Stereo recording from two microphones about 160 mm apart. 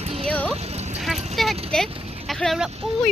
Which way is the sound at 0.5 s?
40° right (ahead or behind).